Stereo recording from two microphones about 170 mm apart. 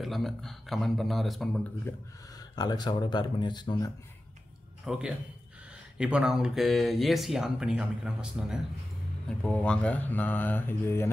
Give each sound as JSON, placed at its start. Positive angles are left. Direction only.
{"t": 0.0, "sound": "speech", "side_deg": 0}
{"t": 1.9, "sound": "speech", "side_deg": 20}
{"t": 4.8, "sound": "a man's voice", "side_deg": -5}
{"t": 9.4, "sound": "speech", "side_deg": 5}